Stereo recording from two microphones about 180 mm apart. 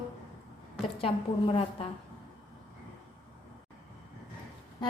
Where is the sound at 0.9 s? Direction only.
30° left (ahead or behind).